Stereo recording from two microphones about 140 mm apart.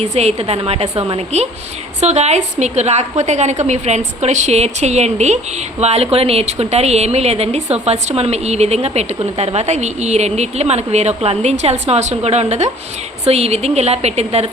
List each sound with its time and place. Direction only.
0.0 s a woman's voice: 50° right (ahead or behind)